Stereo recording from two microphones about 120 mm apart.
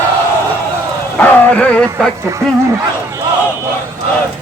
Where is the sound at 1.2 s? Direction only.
10° left (ahead or behind).